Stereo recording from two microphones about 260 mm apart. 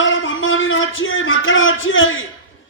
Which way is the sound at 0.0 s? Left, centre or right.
Left.